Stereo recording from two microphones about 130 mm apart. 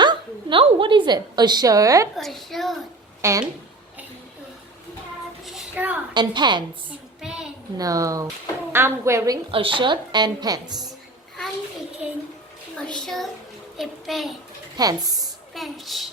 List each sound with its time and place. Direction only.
0.0 s a sound: 35° right (ahead or behind)
0.6 s a woman's voice: 40° right (ahead or behind); by 2.0 s 25° right (ahead or behind)
2.1 s a child's voice: centre (ahead or behind)
3.2 s speech: 20° right (ahead or behind)
5.7 s a woman's voice: 10° right (ahead or behind)
6.1 s a woman's voice: 35° right (ahead or behind)
7.2 s a sound: 5° right (ahead or behind)
7.8 s a woman's voice: 25° right (ahead or behind)
9.5 s a woman's voice: 40° right (ahead or behind)
12.0 s a child's voice: 10° right (ahead or behind)
12.7 s a child's voice: 5° left (ahead or behind)
14.8 s a woman's voice: 30° right (ahead or behind)
15.5 s a child's voice: centre (ahead or behind)